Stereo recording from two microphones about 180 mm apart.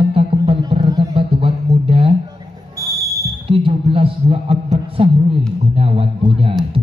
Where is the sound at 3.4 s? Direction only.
30° right (ahead or behind).